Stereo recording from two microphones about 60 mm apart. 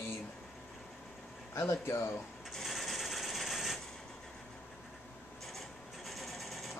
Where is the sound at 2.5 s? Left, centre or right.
Centre.